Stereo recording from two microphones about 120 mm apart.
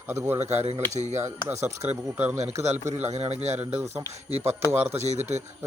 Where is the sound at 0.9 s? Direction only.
70° right (ahead or behind).